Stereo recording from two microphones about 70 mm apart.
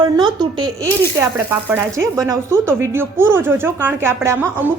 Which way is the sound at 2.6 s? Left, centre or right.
Right.